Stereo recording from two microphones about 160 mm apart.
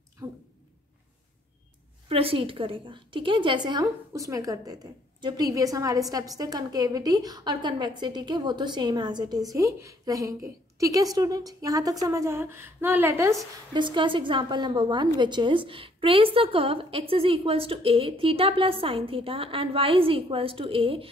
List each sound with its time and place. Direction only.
0.2 s a sound: 25° right (ahead or behind)
2.0 s a woman's voice: 35° right (ahead or behind); by 13.4 s 15° right (ahead or behind)
13.7 s a woman's voice: 30° right (ahead or behind)